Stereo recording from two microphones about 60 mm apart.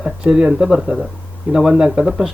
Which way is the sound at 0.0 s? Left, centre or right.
Centre.